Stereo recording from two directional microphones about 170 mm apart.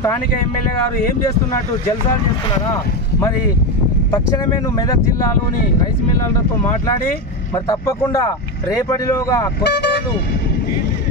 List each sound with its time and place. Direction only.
2.7 s speech: 20° left (ahead or behind)
7.5 s speech: 25° left (ahead or behind)
9.6 s speech: 80° left